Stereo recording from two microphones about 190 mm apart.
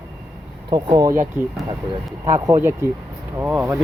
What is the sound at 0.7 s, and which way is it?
Speech, 20° right (ahead or behind).